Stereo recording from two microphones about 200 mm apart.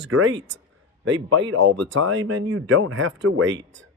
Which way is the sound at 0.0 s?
70° right (ahead or behind).